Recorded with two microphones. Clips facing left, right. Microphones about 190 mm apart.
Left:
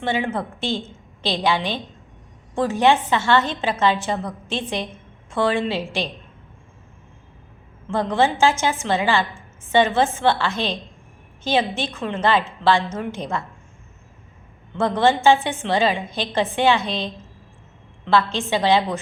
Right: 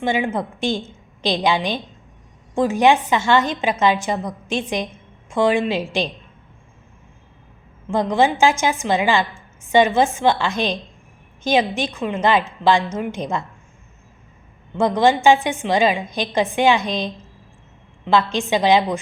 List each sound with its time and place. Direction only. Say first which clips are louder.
0.0 s a woman's voice: right 2 dB; 15° right (ahead or behind)
7.9 s a woman's voice: right 2 dB; 15° right (ahead or behind)
14.8 s a woman's voice: right 2 dB; 15° right (ahead or behind)